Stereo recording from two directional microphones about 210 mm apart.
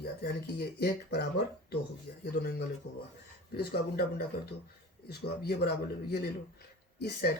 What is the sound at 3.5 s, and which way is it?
Speech, 50° left (ahead or behind).